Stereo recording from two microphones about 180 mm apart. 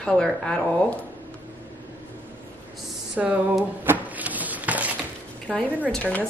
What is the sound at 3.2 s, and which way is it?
Speech, 5° right (ahead or behind).